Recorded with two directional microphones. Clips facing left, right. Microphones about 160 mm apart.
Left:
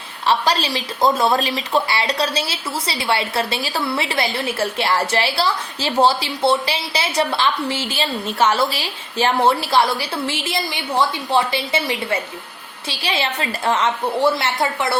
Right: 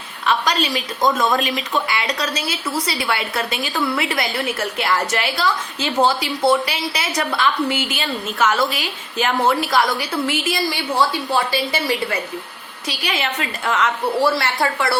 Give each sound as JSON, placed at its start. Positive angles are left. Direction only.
{"t": 0.3, "sound": "a woman's voice", "side_deg": 30}